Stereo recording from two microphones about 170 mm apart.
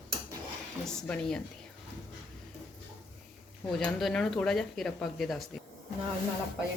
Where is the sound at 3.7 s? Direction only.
5° left (ahead or behind).